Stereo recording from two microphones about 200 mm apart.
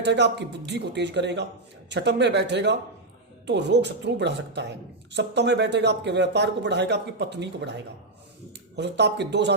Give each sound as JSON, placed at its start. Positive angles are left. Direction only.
{"t": 0.0, "sound": "speech", "side_deg": -60}